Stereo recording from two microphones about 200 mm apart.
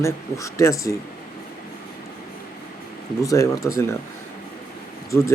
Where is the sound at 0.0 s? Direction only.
15° left (ahead or behind).